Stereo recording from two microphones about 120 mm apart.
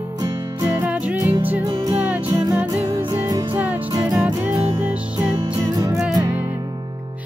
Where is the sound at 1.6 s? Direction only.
30° right (ahead or behind).